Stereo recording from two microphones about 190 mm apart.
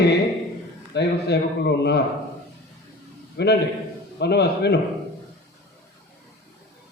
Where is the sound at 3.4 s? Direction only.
65° left (ahead or behind).